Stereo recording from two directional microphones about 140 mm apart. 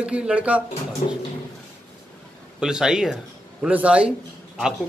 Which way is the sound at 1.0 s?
65° left (ahead or behind).